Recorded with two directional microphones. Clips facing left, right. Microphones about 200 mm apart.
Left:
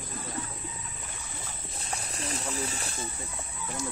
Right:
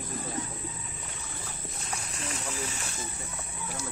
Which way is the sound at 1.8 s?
35° left (ahead or behind).